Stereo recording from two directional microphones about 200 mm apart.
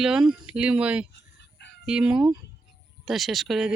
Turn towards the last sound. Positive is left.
turn(degrees=0)  # may be behind; listen again after turning